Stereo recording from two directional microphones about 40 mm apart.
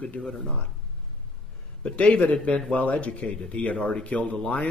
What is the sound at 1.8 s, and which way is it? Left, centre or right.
Speech, left.